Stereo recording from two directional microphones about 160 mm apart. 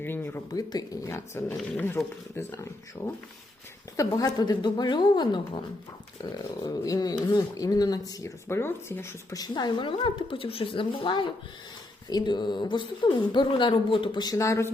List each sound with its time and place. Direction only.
0.0 s speech: 15° left (ahead or behind)
2.0 s speech: centre (ahead or behind)
2.5 s speech: 20° left (ahead or behind)